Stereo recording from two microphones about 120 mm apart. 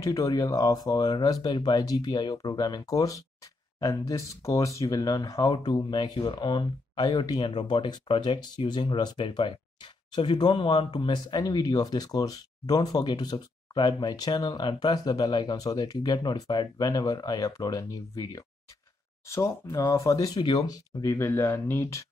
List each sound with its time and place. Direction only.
0.0 s speech: 25° left (ahead or behind)